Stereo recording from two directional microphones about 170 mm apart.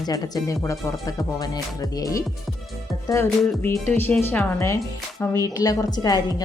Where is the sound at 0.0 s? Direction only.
20° left (ahead or behind).